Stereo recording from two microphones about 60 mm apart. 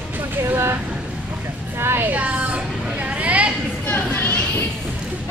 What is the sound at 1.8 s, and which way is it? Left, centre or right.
Music, right.